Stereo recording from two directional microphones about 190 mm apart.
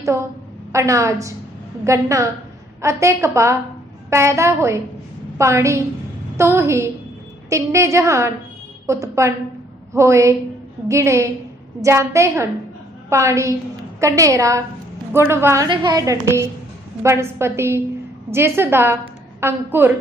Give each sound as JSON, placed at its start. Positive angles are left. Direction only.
{"t": 0.7, "sound": "a woman's voice", "side_deg": -15}